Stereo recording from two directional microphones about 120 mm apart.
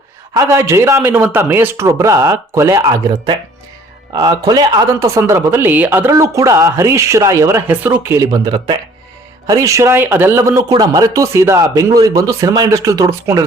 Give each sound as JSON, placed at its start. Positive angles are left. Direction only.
{"t": 0.3, "sound": "speech", "side_deg": -25}
{"t": 8.5, "sound": "speech", "side_deg": -40}
{"t": 9.5, "sound": "speech", "side_deg": -25}